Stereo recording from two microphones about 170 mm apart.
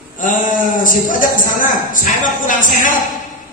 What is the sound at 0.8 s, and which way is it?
Speech, 50° left (ahead or behind).